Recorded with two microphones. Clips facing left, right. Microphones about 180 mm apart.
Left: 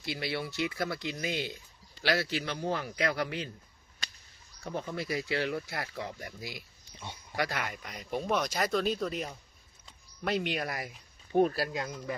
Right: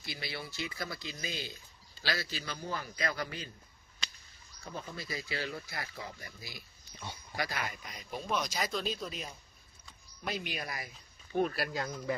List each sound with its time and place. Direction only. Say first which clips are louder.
0.0 s a man's voice: left 7 dB; 70° left (ahead or behind)
4.6 s a man's voice: left 7 dB; 65° left (ahead or behind)
11.3 s speech: left 5 dB; 35° left (ahead or behind)